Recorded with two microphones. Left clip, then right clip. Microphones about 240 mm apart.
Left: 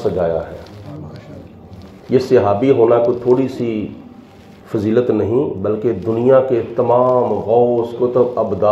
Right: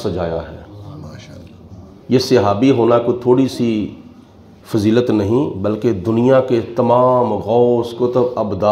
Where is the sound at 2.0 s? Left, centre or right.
Right.